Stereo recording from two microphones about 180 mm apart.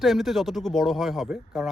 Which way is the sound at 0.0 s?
Centre (ahead or behind).